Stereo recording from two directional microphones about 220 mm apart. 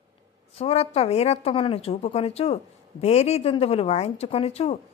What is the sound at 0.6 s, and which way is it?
Speech, 30° left (ahead or behind).